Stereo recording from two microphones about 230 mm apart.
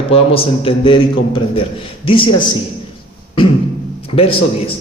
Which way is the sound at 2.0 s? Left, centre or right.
Left.